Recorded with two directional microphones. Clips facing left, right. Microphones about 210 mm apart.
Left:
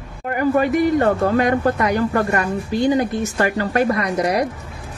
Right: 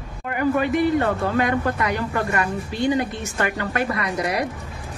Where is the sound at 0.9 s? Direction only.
40° left (ahead or behind).